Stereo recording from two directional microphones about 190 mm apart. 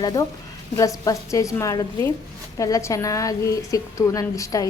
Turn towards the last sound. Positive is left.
turn(degrees=15)  # may be behind; listen again after turning